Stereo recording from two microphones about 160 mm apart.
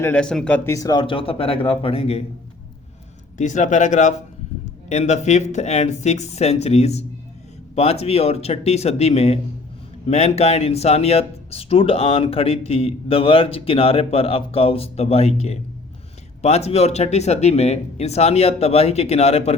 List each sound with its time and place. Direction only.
0.0 s speech: 10° left (ahead or behind); by 2.2 s 40° left (ahead or behind)
3.3 s speech: 50° left (ahead or behind)